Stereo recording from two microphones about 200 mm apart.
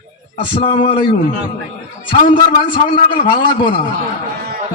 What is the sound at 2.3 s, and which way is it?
A man's voice, 25° left (ahead or behind).